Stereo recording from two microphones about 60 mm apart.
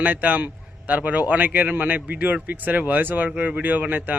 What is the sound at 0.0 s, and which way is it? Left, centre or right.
A man's voice, right.